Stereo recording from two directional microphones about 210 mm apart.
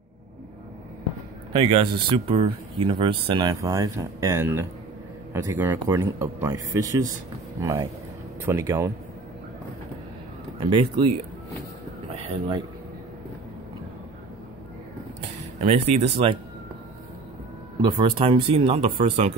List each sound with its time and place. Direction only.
1.5 s speech: 25° right (ahead or behind)
10.6 s speech: 25° right (ahead or behind)
12.2 s speech: 25° right (ahead or behind)
15.6 s speech: 30° right (ahead or behind)
17.8 s speech: 20° right (ahead or behind)